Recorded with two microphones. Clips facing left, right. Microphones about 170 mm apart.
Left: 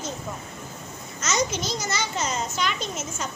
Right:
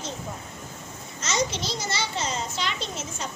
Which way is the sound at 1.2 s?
30° right (ahead or behind).